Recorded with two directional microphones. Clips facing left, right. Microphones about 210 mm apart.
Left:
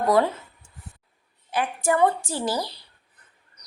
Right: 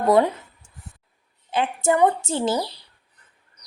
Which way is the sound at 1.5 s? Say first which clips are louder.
Right 3 dB; 25° right (ahead or behind).